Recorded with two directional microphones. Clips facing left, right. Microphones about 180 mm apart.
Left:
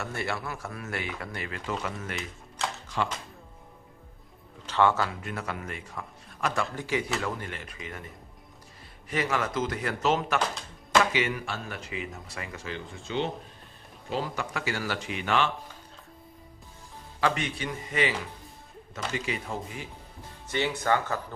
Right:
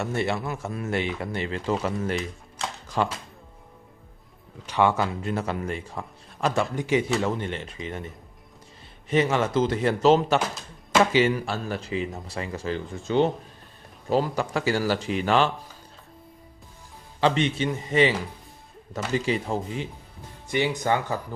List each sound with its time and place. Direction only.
0.0 s speech: 25° right (ahead or behind)
2.1 s typewriter: centre (ahead or behind)
4.6 s speech: 15° right (ahead or behind)
5.2 s speech: 30° right (ahead or behind)
6.7 s speech: 20° right (ahead or behind)
9.0 s speech: 25° right (ahead or behind); by 13.3 s 45° right (ahead or behind)
14.1 s speech: 35° right (ahead or behind)
17.2 s speech: 25° right (ahead or behind)
19.1 s speech: 30° right (ahead or behind)
20.5 s speech: 15° right (ahead or behind)